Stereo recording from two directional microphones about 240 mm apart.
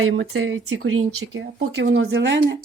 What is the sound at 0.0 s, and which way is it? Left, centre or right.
Speech, right.